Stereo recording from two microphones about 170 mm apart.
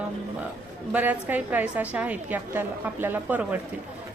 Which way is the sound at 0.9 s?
10° right (ahead or behind).